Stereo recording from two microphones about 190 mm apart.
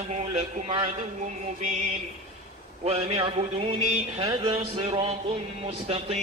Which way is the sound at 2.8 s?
30° right (ahead or behind).